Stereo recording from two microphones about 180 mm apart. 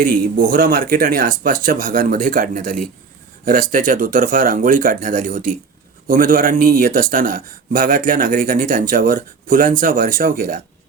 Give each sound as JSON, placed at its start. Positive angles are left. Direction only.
{"t": 0.0, "sound": "speech", "side_deg": -50}